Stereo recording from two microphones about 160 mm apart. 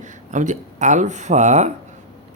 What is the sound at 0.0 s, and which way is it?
Speech, 50° right (ahead or behind).